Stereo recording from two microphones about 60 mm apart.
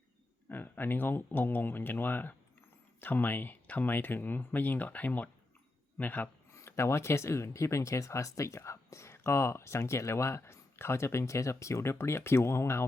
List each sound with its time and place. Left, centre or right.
0.4 s speech: left
6.5 s speech: left